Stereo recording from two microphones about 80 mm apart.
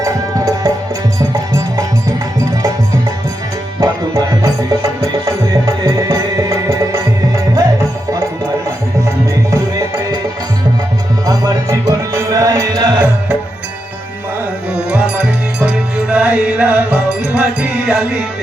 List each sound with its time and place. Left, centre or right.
0.0 s music: right
3.8 s music: right
11.3 s music: right
14.8 s music: centre